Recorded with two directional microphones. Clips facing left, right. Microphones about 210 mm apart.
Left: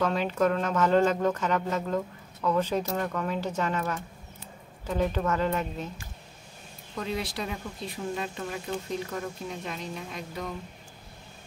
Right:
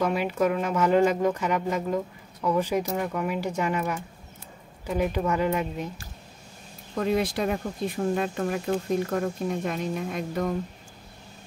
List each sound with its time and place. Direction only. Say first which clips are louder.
0.0 s speech: right 1 dB; 10° right (ahead or behind)
7.0 s speech: right 7 dB; 50° right (ahead or behind)